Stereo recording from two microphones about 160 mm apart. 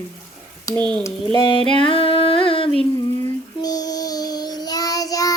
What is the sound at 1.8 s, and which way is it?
Humming, 35° left (ahead or behind).